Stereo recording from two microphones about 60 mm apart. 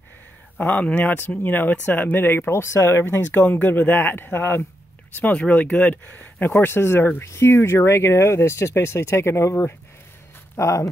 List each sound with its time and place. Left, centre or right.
0.6 s speech: left
5.1 s speech: left
6.5 s speech: left